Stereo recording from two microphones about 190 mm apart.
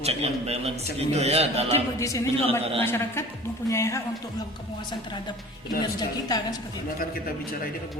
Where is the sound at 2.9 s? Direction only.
15° left (ahead or behind).